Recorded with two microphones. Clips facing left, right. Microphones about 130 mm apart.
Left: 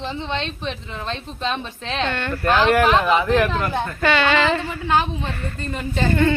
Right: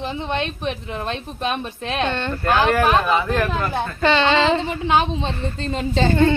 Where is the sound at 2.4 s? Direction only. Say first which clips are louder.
Left 1 dB; 15° right (ahead or behind).